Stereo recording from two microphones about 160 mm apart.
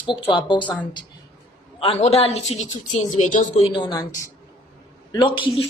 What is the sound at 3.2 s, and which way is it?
Speech, 50° left (ahead or behind).